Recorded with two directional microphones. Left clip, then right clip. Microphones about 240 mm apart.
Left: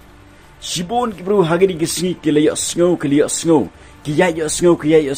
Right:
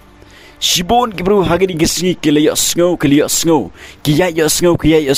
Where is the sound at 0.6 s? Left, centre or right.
Right.